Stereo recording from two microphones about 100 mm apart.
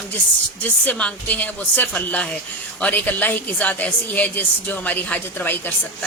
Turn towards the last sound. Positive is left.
turn(degrees=20)  # may be behind; listen again after turning